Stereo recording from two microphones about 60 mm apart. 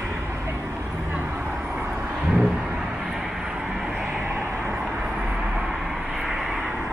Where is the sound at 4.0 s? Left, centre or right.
Centre.